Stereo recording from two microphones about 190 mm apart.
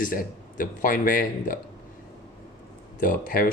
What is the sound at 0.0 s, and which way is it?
Speech, 45° left (ahead or behind).